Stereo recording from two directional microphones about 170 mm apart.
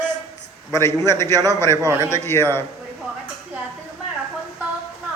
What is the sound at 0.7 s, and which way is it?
A man's voice, 15° left (ahead or behind).